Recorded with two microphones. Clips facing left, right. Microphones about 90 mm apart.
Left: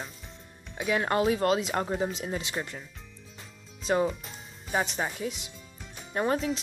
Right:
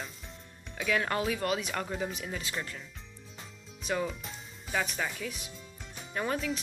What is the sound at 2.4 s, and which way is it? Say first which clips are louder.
Speech: left 3 dB; 20° left (ahead or behind).